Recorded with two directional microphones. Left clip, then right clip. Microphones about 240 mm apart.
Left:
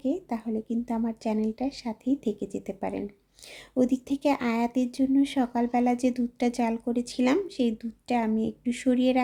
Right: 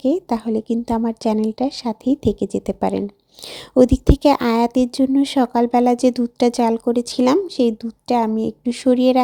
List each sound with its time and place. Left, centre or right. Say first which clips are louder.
0.0 s a woman's voice: right 11 dB; right